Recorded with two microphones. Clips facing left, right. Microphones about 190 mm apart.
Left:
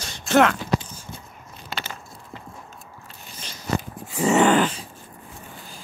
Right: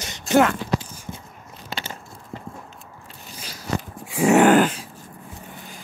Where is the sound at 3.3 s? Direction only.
5° right (ahead or behind).